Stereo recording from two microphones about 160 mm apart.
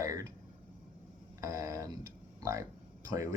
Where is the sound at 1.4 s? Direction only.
20° right (ahead or behind).